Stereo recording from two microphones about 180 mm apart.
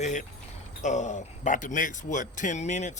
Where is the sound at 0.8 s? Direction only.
40° left (ahead or behind).